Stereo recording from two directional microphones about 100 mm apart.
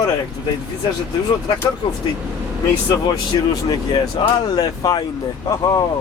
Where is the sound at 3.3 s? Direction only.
45° left (ahead or behind).